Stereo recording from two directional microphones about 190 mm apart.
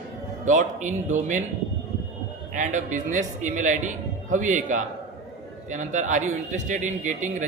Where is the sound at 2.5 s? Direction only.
40° right (ahead or behind).